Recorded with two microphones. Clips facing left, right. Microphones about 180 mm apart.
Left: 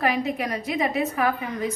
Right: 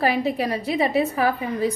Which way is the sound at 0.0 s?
30° right (ahead or behind).